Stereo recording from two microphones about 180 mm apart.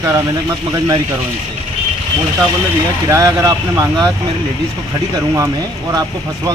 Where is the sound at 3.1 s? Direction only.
15° right (ahead or behind).